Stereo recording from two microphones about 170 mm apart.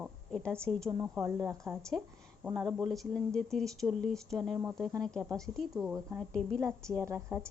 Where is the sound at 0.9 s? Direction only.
15° right (ahead or behind).